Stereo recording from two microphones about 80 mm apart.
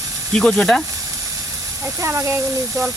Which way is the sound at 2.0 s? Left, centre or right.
Right.